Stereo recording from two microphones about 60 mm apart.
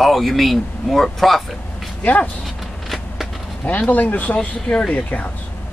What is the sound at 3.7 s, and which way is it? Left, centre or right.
Speech, left.